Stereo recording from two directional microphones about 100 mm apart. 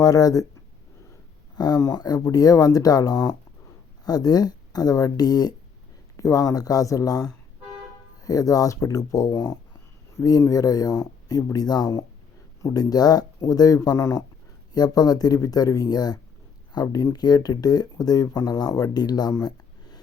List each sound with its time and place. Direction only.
0.0 s speech: 35° left (ahead or behind)
1.5 s speech: 40° left (ahead or behind)
14.7 s speech: 40° left (ahead or behind)
19.3 s a sound: 40° left (ahead or behind)